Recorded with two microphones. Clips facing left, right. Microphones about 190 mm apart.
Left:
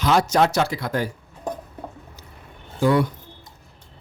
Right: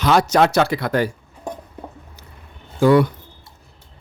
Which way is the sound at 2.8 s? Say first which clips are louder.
Right 5 dB; 70° right (ahead or behind).